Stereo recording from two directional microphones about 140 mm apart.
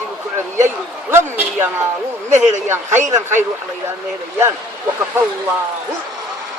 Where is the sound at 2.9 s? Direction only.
60° right (ahead or behind).